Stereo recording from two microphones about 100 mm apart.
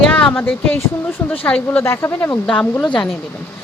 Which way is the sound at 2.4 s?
10° left (ahead or behind).